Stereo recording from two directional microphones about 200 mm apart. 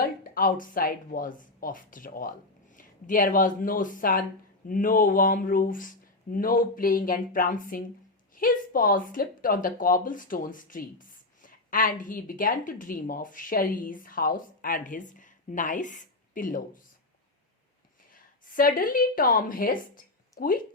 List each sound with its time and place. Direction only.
0.0 s a woman's voice: 45° left (ahead or behind)
18.1 s a woman's voice: 45° left (ahead or behind)